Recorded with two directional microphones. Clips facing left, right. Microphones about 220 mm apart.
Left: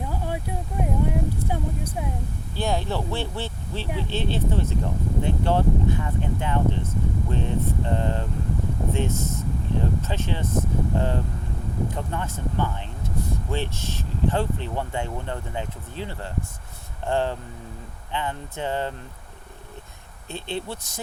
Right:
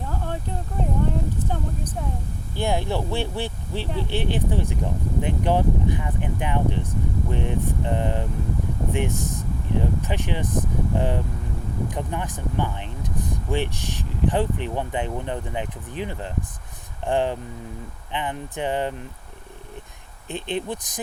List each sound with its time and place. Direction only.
0.0 s a sound: 10° left (ahead or behind)
2.6 s speech: 15° right (ahead or behind)
20.2 s speech: 15° right (ahead or behind)